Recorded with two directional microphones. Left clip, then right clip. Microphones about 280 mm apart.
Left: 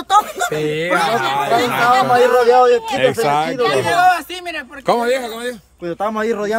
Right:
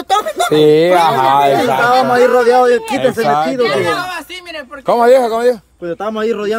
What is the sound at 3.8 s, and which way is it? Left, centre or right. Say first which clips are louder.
Speech: left 3 dB; centre.